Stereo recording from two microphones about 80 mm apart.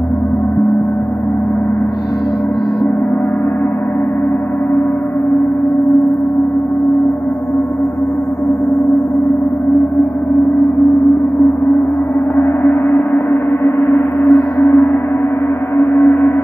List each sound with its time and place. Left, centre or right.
12.9 s gong: left